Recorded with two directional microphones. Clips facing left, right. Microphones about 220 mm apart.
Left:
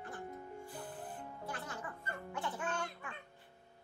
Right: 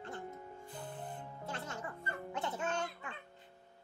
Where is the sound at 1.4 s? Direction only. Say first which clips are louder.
Right 2 dB; 25° right (ahead or behind).